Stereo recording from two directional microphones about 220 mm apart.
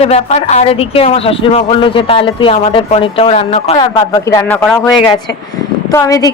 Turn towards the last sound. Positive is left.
turn(degrees=15)  # may be behind; listen again after turning